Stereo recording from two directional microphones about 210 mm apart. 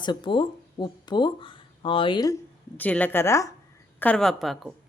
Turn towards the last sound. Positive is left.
turn(degrees=0)  # may be behind; listen again after turning